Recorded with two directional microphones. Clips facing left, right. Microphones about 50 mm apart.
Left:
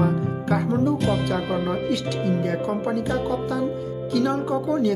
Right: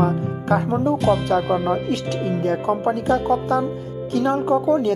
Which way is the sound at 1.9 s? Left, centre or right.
Right.